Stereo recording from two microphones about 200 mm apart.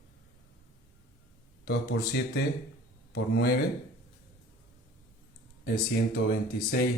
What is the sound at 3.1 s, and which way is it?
Speech, 50° left (ahead or behind).